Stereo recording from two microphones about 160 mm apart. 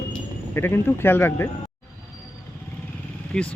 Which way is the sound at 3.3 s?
5° left (ahead or behind).